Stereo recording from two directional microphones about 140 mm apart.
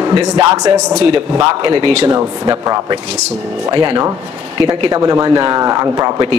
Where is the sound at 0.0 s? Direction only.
25° right (ahead or behind).